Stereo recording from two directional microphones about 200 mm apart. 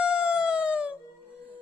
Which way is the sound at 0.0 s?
5° right (ahead or behind).